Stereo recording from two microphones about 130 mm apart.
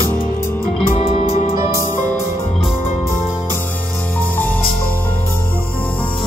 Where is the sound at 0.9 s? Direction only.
45° left (ahead or behind).